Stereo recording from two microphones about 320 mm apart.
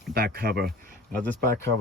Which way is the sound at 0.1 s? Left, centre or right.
Right.